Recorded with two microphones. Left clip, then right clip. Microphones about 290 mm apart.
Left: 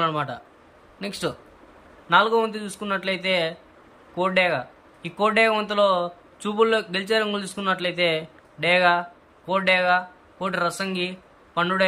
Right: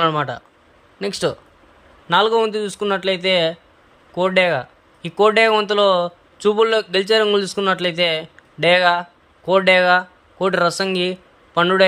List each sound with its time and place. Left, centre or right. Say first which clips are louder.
0.0 s a man's voice: right 6 dB; centre